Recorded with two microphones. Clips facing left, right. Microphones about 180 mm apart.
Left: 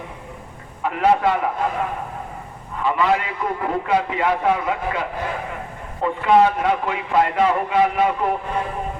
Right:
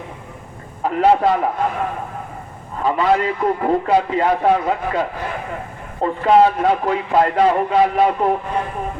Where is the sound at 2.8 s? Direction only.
40° right (ahead or behind).